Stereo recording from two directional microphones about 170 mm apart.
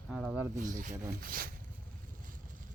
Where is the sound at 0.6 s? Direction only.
50° right (ahead or behind).